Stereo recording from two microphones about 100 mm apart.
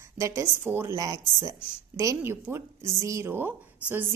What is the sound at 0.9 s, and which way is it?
A woman's voice, 35° right (ahead or behind).